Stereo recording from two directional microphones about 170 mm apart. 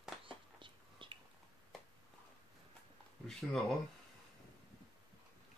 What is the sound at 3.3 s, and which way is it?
Speech, 5° left (ahead or behind).